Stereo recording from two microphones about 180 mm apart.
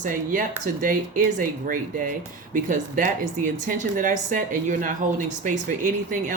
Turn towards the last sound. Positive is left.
turn(degrees=-45)  # may be behind; listen again after turning